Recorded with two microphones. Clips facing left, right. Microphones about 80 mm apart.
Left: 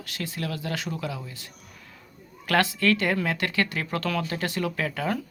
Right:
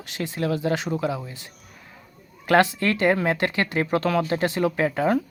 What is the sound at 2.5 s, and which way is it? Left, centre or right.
Speech, right.